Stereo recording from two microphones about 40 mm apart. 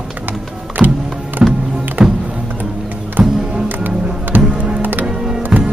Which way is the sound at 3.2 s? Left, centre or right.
Right.